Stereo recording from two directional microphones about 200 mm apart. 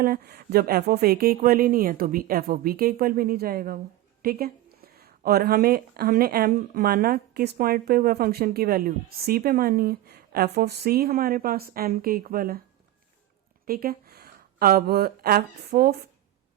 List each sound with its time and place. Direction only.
0.0 s speech: 50° right (ahead or behind)
13.7 s speech: 45° right (ahead or behind)